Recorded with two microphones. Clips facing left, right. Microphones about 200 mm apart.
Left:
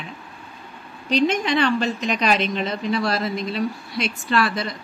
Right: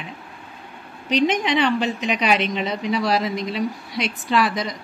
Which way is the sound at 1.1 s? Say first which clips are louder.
Even; 15° right (ahead or behind).